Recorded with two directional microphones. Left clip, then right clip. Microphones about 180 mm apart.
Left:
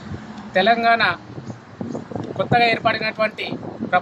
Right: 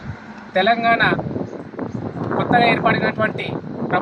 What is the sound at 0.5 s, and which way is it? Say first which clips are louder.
Speech: even; 10° left (ahead or behind).